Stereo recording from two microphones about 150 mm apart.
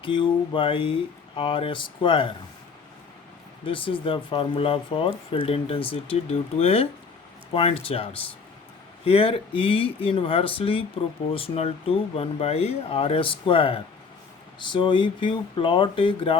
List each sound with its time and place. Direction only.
0.0 s speech: 35° left (ahead or behind)
3.7 s speech: 35° left (ahead or behind)
9.0 s speech: 40° left (ahead or behind)